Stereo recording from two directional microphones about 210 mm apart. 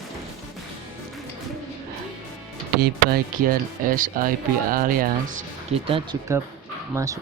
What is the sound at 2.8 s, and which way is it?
Speech, 45° right (ahead or behind).